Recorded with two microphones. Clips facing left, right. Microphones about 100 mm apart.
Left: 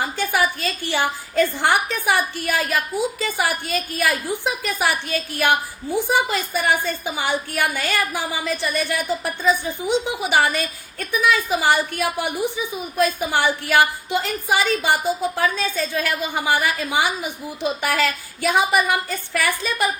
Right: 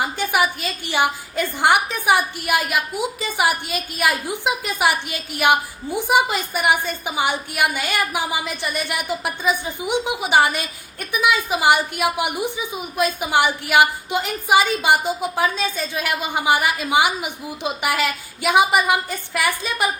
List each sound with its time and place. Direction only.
0.0 s a woman's voice: 15° right (ahead or behind)